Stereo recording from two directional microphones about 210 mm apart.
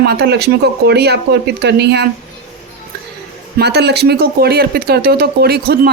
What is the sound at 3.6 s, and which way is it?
Speech, 50° right (ahead or behind).